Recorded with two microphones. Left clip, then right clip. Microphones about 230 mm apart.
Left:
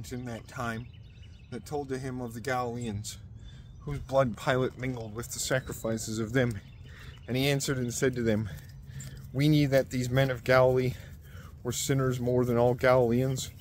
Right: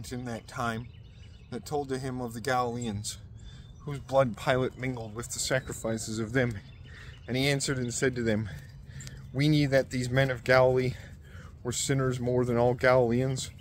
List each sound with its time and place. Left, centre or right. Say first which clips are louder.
0.0 s speech: right 2 dB; right
3.8 s speech: right 1 dB; centre